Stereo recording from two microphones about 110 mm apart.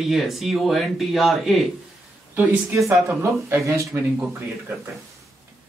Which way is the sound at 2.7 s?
25° right (ahead or behind).